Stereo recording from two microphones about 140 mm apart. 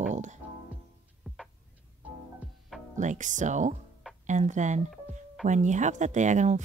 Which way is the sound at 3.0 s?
60° right (ahead or behind).